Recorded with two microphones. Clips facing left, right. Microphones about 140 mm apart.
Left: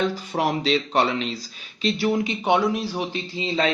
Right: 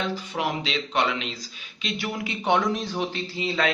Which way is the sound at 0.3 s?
40° left (ahead or behind).